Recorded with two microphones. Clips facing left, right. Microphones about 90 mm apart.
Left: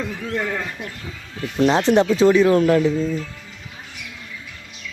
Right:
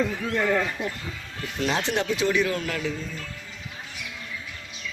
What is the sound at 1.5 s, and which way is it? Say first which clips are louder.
Speech: left 10 dB; 35° left (ahead or behind).